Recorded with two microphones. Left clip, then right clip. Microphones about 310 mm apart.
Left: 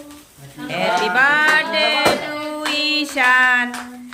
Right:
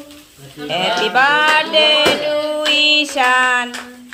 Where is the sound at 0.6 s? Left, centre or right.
Centre.